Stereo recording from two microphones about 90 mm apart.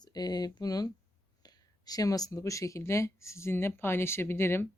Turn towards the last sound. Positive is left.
turn(degrees=25)  # may be behind; listen again after turning